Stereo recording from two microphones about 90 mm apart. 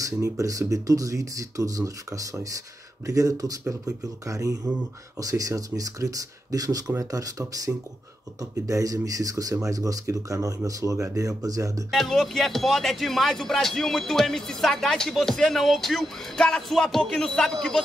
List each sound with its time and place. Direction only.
0.0 s speech: 35° right (ahead or behind)
11.9 s speech: centre (ahead or behind)